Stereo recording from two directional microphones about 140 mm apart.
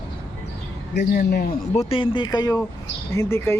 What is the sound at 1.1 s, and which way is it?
Speech, 90° left.